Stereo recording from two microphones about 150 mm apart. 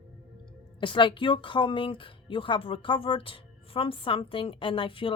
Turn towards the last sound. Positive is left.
turn(degrees=35)  # may be behind; listen again after turning